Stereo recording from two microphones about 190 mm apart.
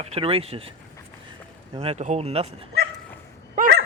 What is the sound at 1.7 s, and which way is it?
Speech, 30° right (ahead or behind).